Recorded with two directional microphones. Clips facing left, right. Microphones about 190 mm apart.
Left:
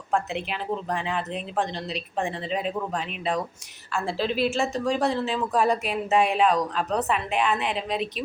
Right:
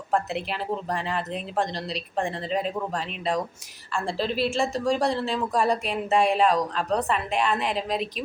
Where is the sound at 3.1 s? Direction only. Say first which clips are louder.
Right 1 dB; 5° left (ahead or behind).